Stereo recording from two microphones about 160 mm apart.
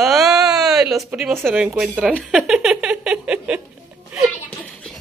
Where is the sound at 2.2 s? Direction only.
5° right (ahead or behind).